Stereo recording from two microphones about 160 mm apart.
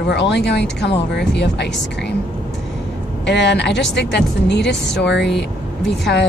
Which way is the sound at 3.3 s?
90° left.